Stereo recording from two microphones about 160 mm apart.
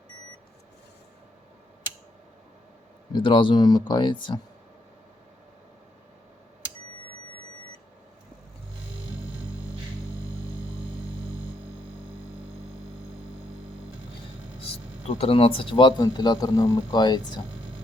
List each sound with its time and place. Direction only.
3.1 s speech: 30° left (ahead or behind)
14.6 s speech: 40° left (ahead or behind)